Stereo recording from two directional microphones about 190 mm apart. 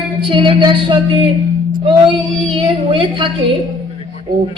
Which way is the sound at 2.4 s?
25° right (ahead or behind).